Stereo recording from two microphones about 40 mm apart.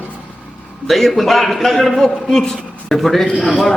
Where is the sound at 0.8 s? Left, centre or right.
Centre.